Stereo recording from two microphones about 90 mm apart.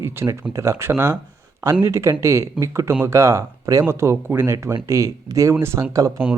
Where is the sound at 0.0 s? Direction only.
25° right (ahead or behind).